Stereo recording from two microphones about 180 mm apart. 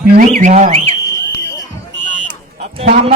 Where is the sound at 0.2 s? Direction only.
45° right (ahead or behind).